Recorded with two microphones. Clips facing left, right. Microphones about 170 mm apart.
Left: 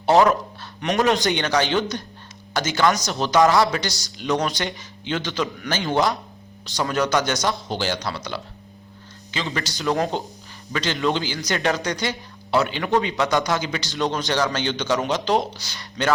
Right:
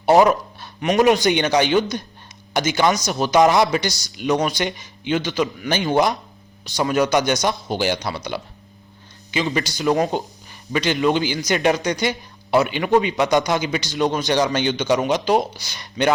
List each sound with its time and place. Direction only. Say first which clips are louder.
0.0 s a man's voice: right 2 dB; 15° right (ahead or behind)